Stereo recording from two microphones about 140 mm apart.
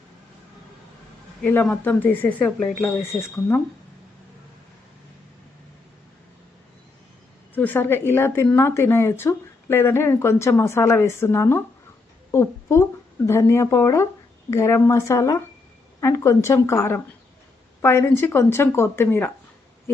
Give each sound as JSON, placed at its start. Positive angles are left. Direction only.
{"t": 1.4, "sound": "a woman's voice", "side_deg": 10}
{"t": 3.1, "sound": "a woman's voice", "side_deg": 20}
{"t": 7.5, "sound": "a woman's voice", "side_deg": 15}